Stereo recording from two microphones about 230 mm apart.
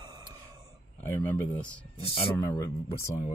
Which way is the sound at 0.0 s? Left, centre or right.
Centre.